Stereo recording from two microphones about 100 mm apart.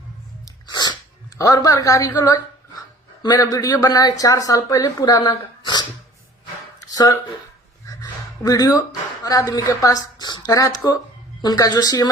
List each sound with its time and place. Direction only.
0.7 s sneeze: 45° left (ahead or behind)
1.4 s speech: 40° left (ahead or behind)
6.9 s speech: 40° left (ahead or behind)
8.4 s speech: 35° left (ahead or behind)